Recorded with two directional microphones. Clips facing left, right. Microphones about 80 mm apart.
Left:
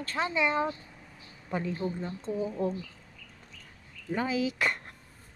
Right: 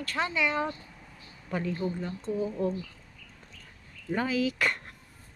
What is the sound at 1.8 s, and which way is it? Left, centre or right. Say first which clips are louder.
Speech: right 1 dB; centre.